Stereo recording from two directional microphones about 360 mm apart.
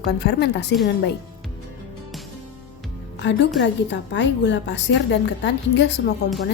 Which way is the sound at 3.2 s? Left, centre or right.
Left.